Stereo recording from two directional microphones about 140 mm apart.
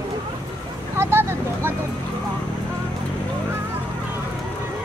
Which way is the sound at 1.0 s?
20° right (ahead or behind).